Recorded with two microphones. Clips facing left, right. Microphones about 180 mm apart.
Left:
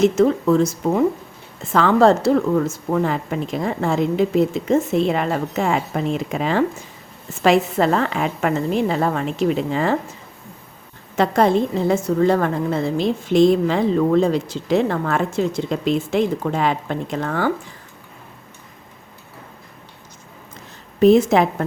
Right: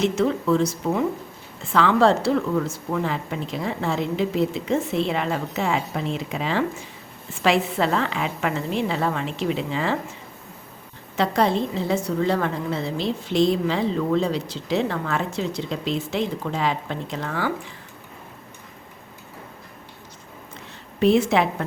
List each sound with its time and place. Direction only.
0.0 s a woman's voice: 45° left (ahead or behind)
11.2 s a woman's voice: 50° left (ahead or behind)
21.0 s a woman's voice: 45° left (ahead or behind)